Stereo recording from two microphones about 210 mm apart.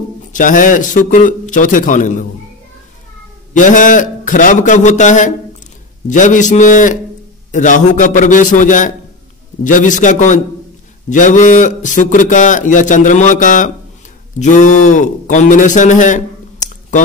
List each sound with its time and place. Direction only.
0.3 s a man's voice: 40° left (ahead or behind)
3.5 s a man's voice: 40° left (ahead or behind)